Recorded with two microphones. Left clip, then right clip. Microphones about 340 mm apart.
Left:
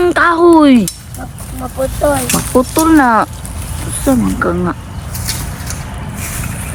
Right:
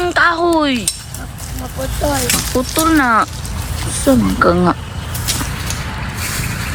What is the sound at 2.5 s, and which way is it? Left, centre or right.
Speech, centre.